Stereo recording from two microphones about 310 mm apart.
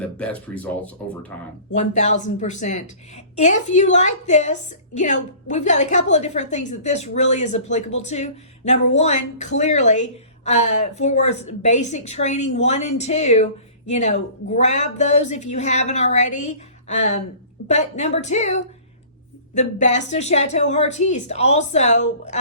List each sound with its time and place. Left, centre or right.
0.0 s speech: centre
2.2 s a woman's voice: left